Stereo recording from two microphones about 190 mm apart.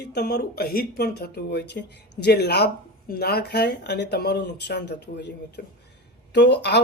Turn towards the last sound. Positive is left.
turn(degrees=60)  # may be behind; listen again after turning